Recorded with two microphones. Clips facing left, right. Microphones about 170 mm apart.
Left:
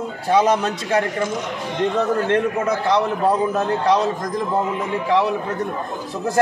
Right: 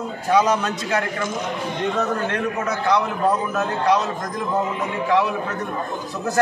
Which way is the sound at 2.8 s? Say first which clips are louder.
Even; 30° left (ahead or behind).